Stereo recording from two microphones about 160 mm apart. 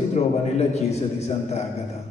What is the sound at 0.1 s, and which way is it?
A man's voice, 45° left (ahead or behind).